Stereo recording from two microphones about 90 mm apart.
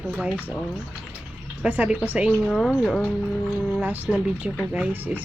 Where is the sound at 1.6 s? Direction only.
15° right (ahead or behind).